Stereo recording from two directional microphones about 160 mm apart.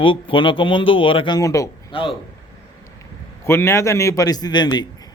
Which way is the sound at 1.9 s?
35° left (ahead or behind).